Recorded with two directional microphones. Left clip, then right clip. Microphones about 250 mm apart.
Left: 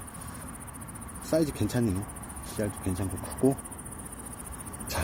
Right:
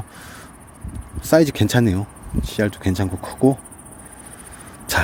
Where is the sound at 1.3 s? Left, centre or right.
Right.